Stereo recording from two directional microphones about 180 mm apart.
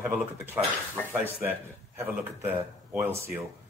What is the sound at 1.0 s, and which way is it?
Dishes, 10° left (ahead or behind).